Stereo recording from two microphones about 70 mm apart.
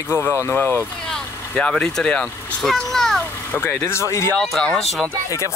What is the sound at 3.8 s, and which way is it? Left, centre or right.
Speech, left.